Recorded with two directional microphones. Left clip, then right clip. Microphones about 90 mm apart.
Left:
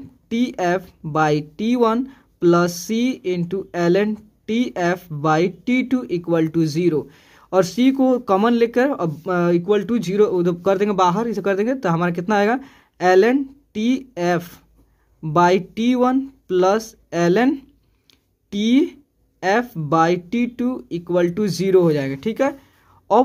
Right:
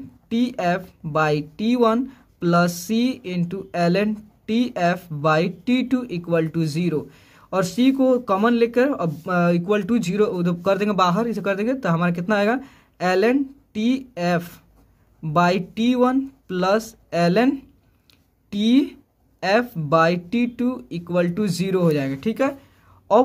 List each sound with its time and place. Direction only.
0.3 s speech: 45° left (ahead or behind)
9.7 s speech: 25° left (ahead or behind)